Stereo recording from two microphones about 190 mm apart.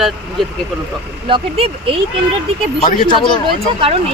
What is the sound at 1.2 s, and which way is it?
Speech, 30° right (ahead or behind).